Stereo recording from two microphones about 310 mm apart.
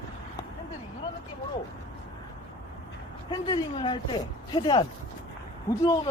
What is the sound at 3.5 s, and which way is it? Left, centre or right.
A man's voice, centre.